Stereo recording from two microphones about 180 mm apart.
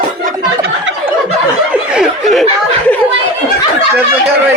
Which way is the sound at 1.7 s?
Centre (ahead or behind).